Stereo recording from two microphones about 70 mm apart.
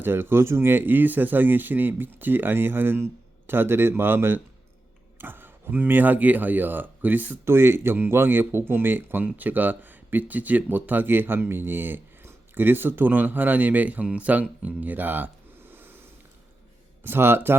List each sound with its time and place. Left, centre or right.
0.0 s a man's voice: right
17.0 s a man's voice: right